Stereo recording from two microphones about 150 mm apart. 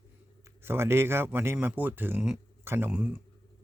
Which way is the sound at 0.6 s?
15° right (ahead or behind).